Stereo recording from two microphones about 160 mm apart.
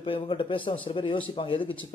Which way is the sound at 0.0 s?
30° left (ahead or behind).